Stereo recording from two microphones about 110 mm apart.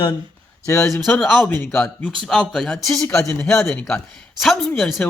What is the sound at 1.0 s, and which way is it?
Speech, 10° left (ahead or behind).